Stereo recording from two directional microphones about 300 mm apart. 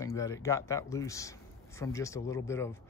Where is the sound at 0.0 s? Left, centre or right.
Centre.